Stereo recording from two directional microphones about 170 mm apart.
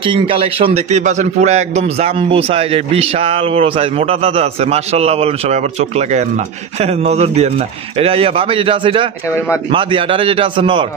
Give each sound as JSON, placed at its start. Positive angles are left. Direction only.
{"t": 0.0, "sound": "a man's voice", "side_deg": -30}